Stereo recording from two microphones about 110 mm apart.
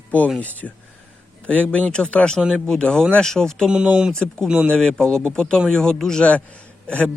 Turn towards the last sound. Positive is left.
turn(degrees=10)  # may be behind; listen again after turning